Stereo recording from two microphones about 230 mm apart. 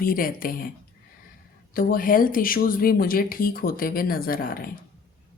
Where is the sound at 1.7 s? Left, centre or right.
Left.